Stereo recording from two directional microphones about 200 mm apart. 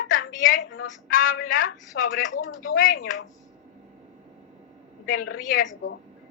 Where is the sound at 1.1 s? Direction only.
45° left (ahead or behind).